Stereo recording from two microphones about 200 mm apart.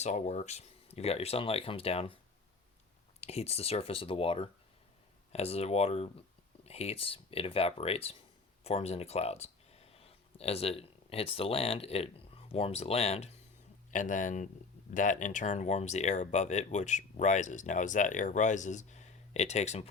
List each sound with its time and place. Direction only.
0.0 s speech: 35° left (ahead or behind)
3.2 s speech: 30° left (ahead or behind)